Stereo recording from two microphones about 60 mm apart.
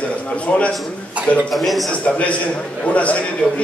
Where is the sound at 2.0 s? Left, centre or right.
Centre.